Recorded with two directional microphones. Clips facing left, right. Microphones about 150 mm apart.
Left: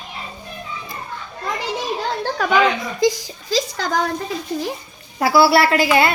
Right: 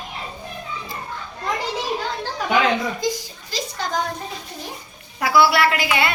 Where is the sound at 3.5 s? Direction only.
90° left.